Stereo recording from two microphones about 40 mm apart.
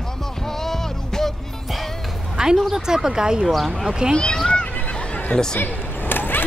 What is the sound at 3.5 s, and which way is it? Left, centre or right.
Speech, centre.